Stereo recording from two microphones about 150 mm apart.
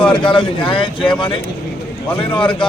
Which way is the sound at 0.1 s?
35° left (ahead or behind).